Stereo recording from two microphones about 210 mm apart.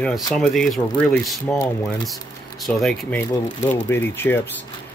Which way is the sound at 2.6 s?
Centre (ahead or behind).